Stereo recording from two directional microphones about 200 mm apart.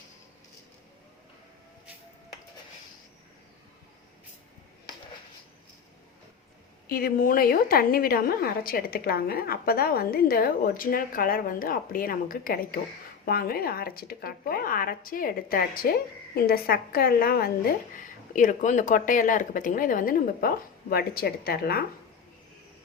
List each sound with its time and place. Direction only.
6.8 s speech: 50° left (ahead or behind)